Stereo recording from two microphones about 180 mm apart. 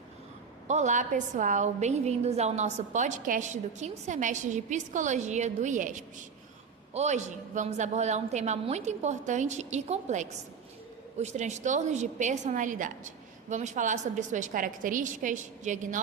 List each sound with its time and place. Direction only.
0.7 s a woman's voice: 40° right (ahead or behind)